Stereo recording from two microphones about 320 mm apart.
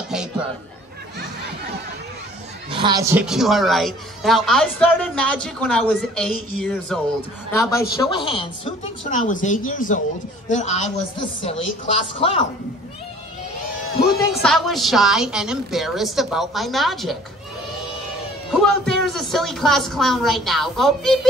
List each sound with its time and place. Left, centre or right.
0.1 s a woman's voice: centre
2.7 s a woman's voice: centre
14.3 s a woman's voice: centre
18.5 s a woman's voice: centre